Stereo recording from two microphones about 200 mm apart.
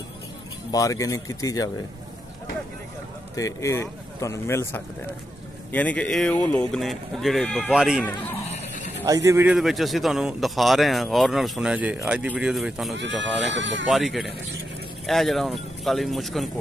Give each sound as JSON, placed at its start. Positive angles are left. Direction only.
{"t": 0.7, "sound": "speech", "side_deg": 15}
{"t": 3.3, "sound": "a man's voice", "side_deg": 15}
{"t": 8.5, "sound": "a sound", "side_deg": 40}
{"t": 9.0, "sound": "a man's voice", "side_deg": -15}
{"t": 13.2, "sound": "speech", "side_deg": -65}
{"t": 13.8, "sound": "a man's voice", "side_deg": 0}